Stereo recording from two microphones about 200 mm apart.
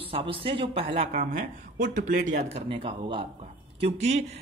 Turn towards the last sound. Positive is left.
turn(degrees=-35)  # may be behind; listen again after turning